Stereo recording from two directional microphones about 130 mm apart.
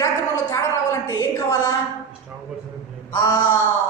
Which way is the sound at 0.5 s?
25° left (ahead or behind).